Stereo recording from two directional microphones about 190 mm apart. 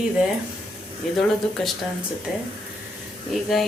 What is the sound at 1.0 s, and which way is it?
Speech, centre (ahead or behind).